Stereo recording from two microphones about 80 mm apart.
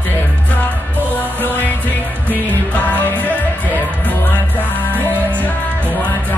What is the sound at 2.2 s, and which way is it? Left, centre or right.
Music, centre.